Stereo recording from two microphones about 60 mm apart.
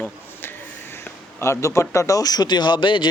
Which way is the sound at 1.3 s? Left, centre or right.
Left.